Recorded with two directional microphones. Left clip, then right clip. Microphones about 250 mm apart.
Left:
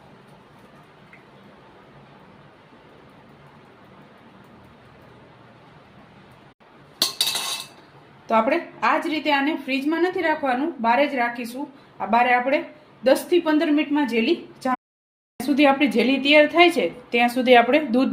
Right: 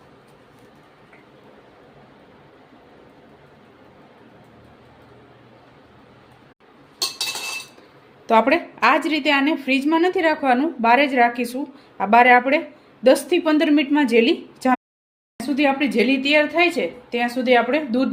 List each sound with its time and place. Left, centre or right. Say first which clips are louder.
8.3 s a woman's voice: right 4 dB; right
15.4 s a woman's voice: left 2 dB; centre